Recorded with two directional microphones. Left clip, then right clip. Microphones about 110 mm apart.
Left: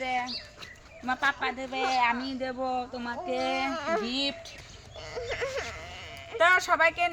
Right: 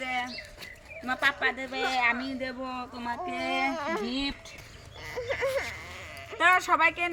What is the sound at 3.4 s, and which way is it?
Speech, 15° left (ahead or behind).